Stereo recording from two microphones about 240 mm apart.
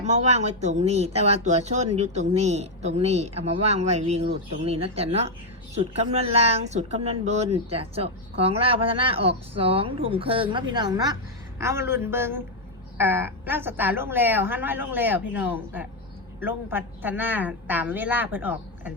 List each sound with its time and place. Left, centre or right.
0.0 s a woman's voice: right; by 18.9 s centre